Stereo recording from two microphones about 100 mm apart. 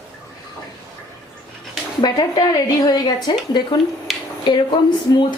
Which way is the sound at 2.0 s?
45° left (ahead or behind).